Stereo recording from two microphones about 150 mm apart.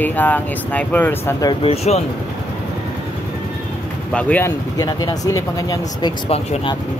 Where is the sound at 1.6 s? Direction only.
45° left (ahead or behind).